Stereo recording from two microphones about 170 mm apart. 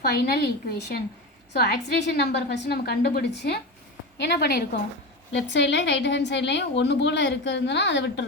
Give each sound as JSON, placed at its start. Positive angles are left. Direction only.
{"t": 0.0, "sound": "a woman's voice", "side_deg": 70}
{"t": 1.5, "sound": "a woman's voice", "side_deg": 80}
{"t": 5.5, "sound": "a woman's voice", "side_deg": 90}